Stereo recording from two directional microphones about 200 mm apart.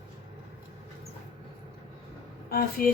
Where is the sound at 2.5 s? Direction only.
50° left (ahead or behind).